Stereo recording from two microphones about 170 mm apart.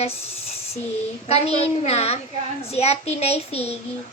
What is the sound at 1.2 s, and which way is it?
Speech, 35° left (ahead or behind).